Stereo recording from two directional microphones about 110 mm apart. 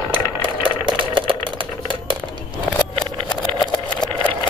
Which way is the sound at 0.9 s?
50° right (ahead or behind).